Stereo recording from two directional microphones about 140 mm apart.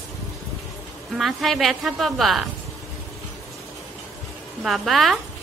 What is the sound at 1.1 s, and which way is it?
A woman's voice, centre (ahead or behind).